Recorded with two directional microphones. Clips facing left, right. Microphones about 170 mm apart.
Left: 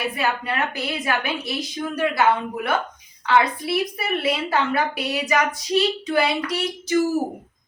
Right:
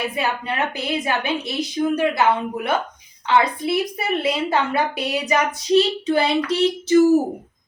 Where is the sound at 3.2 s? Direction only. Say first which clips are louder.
Right 1 dB; 20° right (ahead or behind).